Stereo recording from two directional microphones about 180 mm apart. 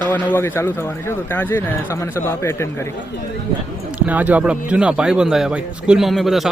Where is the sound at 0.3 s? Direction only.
10° left (ahead or behind).